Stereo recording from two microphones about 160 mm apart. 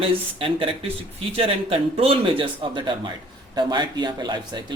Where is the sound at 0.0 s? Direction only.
35° right (ahead or behind).